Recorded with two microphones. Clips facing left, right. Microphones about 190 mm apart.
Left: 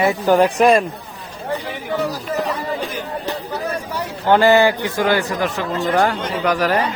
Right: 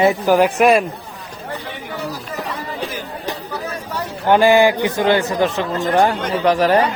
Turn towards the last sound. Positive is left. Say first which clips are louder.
# right 4 dB
turn(degrees=-30)  # may be behind; listen again after turning